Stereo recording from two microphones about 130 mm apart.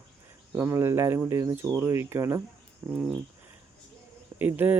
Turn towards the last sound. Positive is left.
turn(degrees=-15)  # may be behind; listen again after turning